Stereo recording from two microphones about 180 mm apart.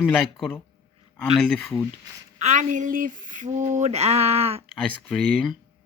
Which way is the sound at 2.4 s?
40° right (ahead or behind).